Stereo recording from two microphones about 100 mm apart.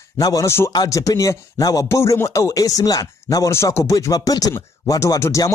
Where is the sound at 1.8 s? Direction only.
30° left (ahead or behind).